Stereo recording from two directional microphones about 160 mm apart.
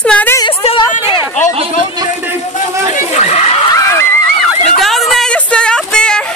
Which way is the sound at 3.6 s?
20° left (ahead or behind).